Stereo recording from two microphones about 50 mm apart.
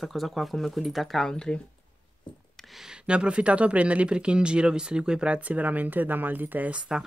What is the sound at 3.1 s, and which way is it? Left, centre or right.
Speech, right.